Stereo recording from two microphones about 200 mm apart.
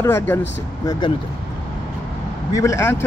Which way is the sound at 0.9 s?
20° left (ahead or behind).